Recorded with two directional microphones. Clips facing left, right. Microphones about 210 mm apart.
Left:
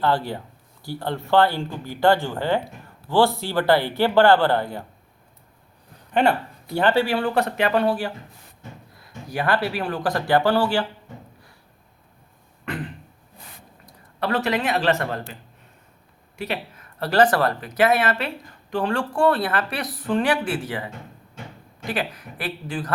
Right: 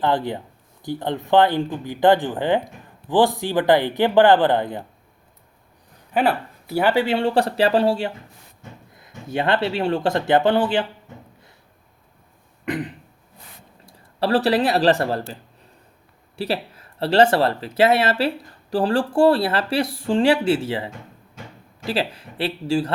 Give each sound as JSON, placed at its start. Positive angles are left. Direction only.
{"t": 0.0, "sound": "speech", "side_deg": -20}
{"t": 6.1, "sound": "speech", "side_deg": -5}
{"t": 12.6, "sound": "throat clearing", "side_deg": -20}
{"t": 13.8, "sound": "speech", "side_deg": -30}